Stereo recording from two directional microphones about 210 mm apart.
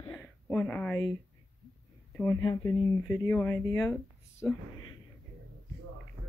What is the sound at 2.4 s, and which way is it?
Speech, 20° left (ahead or behind).